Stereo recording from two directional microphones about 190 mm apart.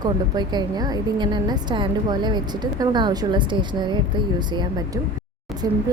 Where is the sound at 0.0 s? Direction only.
20° right (ahead or behind).